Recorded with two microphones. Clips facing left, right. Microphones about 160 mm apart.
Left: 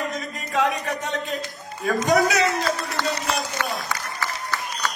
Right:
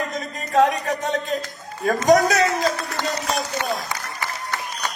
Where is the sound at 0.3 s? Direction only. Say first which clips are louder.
Right 6 dB; 40° right (ahead or behind).